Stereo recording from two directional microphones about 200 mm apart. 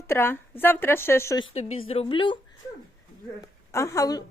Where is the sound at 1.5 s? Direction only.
30° left (ahead or behind).